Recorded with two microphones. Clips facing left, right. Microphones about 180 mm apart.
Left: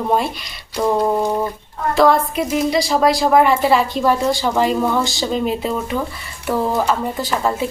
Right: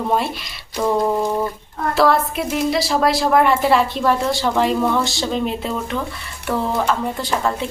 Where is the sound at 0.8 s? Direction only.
10° left (ahead or behind).